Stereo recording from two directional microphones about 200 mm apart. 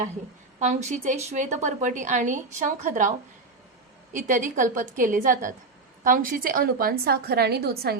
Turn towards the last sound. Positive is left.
turn(degrees=-50)  # may be behind; listen again after turning